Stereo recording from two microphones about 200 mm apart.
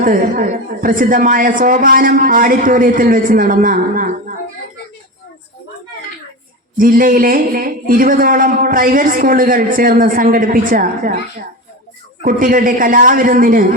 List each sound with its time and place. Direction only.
0.0 s a man's voice: 45° right (ahead or behind)
6.7 s a man's voice: 45° right (ahead or behind)
12.2 s a man's voice: 45° right (ahead or behind)